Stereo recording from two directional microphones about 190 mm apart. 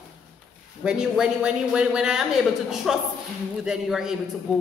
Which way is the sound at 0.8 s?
5° right (ahead or behind).